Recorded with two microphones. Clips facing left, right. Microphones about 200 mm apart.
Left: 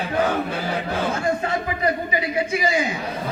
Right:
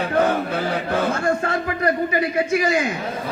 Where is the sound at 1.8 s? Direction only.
55° right (ahead or behind).